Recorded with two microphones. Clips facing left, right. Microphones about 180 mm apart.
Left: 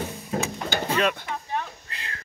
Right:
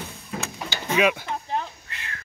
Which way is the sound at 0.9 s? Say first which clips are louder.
Right 4 dB; 10° right (ahead or behind).